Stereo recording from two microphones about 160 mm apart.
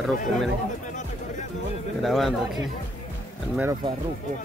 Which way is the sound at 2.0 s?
Centre (ahead or behind).